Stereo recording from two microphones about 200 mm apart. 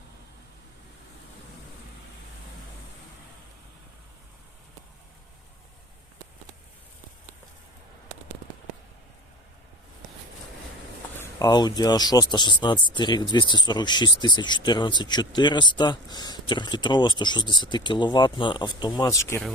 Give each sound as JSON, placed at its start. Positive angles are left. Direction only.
{"t": 11.2, "sound": "speech", "side_deg": 20}